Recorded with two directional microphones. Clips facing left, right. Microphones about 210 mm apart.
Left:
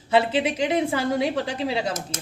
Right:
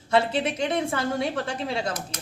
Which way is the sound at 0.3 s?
10° left (ahead or behind).